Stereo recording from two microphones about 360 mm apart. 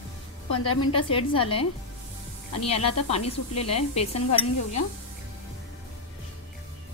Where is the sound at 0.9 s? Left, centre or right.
Centre.